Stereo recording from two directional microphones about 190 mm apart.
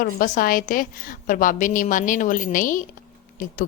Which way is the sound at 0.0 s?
50° left (ahead or behind).